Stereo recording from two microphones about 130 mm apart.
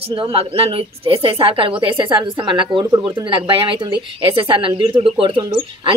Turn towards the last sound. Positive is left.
turn(degrees=-40)  # may be behind; listen again after turning